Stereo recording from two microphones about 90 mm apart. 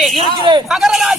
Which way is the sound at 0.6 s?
5° right (ahead or behind).